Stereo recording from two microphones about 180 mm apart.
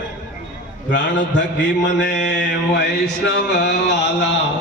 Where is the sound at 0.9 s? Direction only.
80° left.